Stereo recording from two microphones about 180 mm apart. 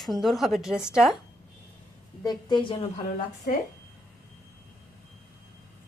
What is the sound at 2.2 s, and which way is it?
Speech, 25° left (ahead or behind).